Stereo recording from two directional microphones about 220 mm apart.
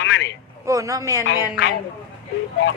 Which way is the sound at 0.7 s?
15° right (ahead or behind).